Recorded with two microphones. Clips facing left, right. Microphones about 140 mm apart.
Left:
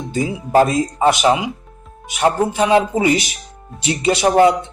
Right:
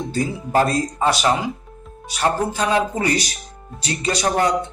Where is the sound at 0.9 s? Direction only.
15° left (ahead or behind).